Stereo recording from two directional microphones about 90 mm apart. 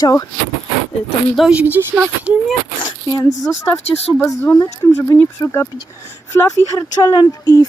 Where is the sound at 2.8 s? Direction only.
55° left (ahead or behind).